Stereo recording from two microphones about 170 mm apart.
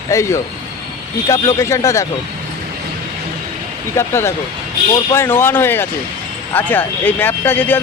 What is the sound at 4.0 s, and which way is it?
Speech, 15° left (ahead or behind).